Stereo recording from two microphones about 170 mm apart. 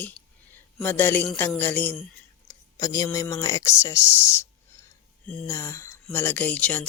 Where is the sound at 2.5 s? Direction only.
20° left (ahead or behind).